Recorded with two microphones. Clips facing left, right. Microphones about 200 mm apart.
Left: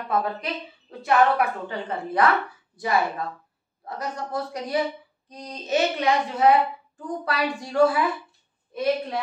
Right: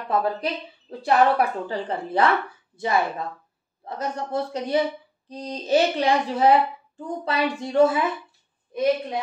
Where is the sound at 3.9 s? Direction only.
25° right (ahead or behind).